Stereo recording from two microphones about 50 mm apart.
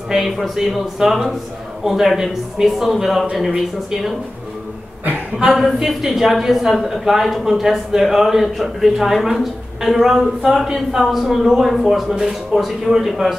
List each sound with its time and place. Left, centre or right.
0.1 s speech: centre
5.5 s speech: centre